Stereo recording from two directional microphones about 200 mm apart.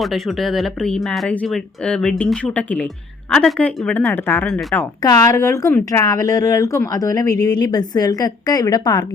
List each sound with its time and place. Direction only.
0.0 s speech: centre (ahead or behind); by 9.0 s 20° left (ahead or behind)